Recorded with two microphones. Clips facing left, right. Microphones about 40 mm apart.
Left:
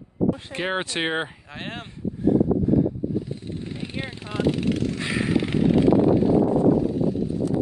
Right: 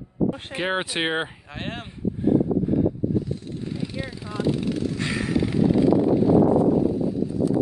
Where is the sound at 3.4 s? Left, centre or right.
Left.